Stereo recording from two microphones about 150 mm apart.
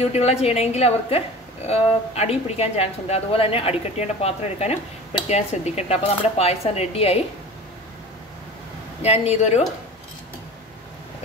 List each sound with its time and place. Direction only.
0.0 s speech: 45° left (ahead or behind)
9.0 s speech: 45° left (ahead or behind)